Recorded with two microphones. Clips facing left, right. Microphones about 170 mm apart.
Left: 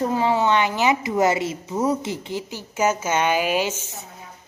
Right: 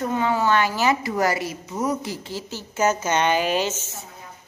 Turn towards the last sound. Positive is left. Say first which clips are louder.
# left 1 dB
turn(degrees=10)  # may be behind; listen again after turning